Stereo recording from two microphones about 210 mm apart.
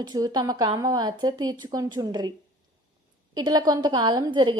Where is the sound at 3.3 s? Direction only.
20° right (ahead or behind).